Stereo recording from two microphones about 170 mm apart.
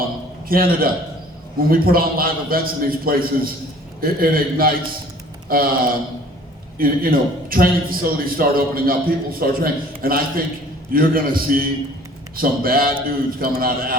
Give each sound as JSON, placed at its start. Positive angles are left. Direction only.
{"t": 0.4, "sound": "a man's voice", "side_deg": -60}